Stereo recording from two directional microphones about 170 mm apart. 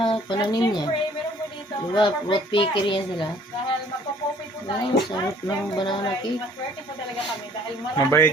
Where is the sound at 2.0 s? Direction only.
30° left (ahead or behind).